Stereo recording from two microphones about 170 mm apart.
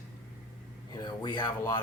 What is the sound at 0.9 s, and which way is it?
Speech, 25° left (ahead or behind).